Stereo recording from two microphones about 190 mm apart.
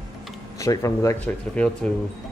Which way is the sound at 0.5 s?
15° left (ahead or behind).